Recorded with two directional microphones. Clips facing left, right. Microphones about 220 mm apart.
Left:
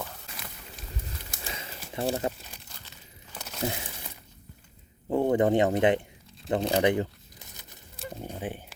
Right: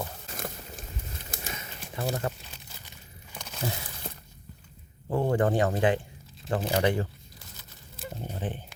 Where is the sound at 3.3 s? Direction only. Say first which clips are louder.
Left 1 dB; 5° left (ahead or behind).